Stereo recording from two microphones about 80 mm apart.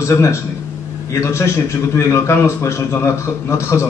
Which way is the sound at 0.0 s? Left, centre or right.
Left.